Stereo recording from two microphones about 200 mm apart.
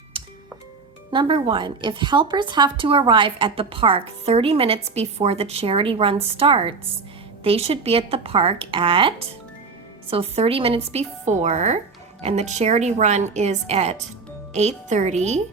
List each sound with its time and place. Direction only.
0.1 s music: 25° right (ahead or behind)
1.1 s a woman's voice: 25° right (ahead or behind)